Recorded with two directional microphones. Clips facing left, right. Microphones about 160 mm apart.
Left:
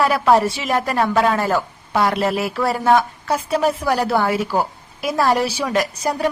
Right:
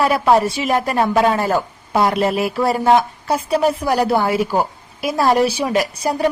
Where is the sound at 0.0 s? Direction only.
15° right (ahead or behind).